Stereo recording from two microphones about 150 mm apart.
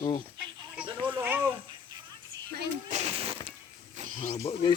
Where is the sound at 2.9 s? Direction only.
45° right (ahead or behind).